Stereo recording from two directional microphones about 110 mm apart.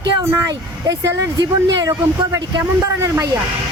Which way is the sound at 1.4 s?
35° right (ahead or behind).